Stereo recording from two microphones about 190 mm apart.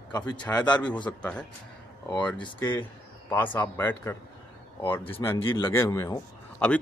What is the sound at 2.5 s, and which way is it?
A man's voice, 10° left (ahead or behind).